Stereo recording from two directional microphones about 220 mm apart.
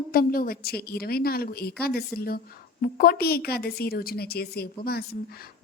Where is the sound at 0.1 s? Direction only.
40° left (ahead or behind).